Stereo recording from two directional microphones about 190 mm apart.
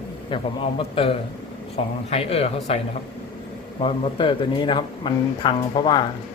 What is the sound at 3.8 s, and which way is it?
Speech, 25° left (ahead or behind).